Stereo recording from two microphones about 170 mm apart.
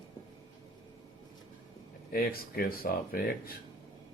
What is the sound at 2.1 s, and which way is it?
A man's voice, 60° left (ahead or behind).